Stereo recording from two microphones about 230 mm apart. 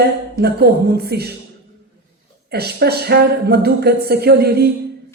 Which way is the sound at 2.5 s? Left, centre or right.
Right.